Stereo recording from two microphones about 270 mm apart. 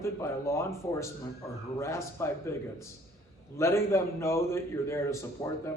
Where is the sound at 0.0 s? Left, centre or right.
Centre.